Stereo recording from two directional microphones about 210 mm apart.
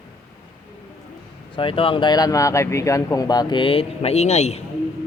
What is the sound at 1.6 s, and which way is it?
Speech, 25° left (ahead or behind).